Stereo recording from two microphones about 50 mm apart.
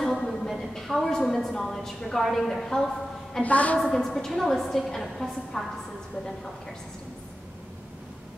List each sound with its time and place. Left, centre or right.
0.0 s a sound: centre
2.2 s a woman's voice: centre
3.4 s a woman's voice: left
3.7 s a woman's voice: centre